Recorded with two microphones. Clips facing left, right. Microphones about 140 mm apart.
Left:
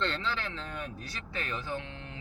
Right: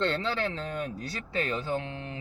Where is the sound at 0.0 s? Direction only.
35° right (ahead or behind).